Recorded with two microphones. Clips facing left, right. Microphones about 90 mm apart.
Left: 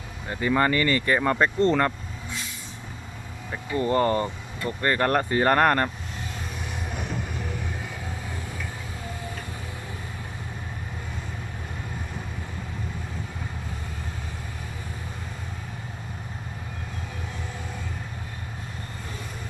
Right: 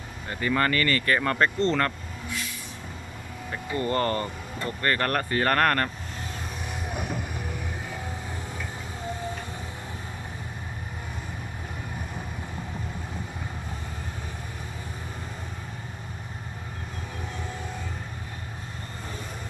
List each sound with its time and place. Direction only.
0.3 s speech: 10° left (ahead or behind)
3.5 s speech: 5° left (ahead or behind)